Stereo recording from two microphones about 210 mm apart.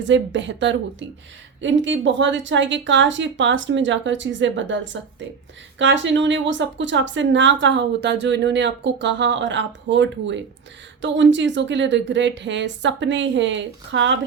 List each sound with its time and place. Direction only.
0.0 s a woman's voice: 60° right (ahead or behind)